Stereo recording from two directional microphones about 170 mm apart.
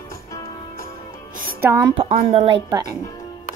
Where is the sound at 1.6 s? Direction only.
15° right (ahead or behind).